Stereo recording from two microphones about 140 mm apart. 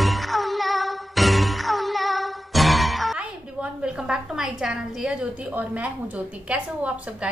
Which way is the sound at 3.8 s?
5° right (ahead or behind).